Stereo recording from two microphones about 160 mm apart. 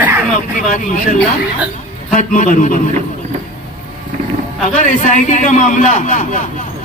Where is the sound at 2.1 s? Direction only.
50° left (ahead or behind).